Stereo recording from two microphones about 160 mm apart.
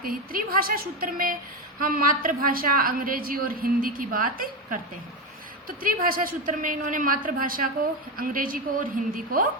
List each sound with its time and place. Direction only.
0.0 s a woman's voice: 65° right (ahead or behind)